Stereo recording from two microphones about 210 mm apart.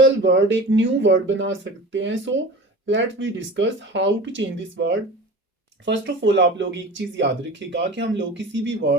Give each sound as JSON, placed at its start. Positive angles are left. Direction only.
{"t": 0.0, "sound": "speech", "side_deg": -60}